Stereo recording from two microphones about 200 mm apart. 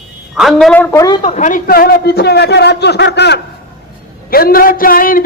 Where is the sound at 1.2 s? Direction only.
35° left (ahead or behind).